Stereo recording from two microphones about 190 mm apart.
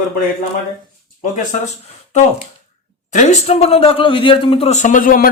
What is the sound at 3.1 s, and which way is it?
A man's voice, 35° left (ahead or behind).